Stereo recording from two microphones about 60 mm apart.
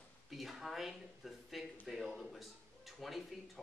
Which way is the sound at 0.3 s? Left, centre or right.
Centre.